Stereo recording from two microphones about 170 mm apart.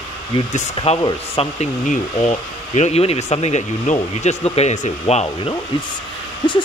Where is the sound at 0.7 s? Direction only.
35° left (ahead or behind).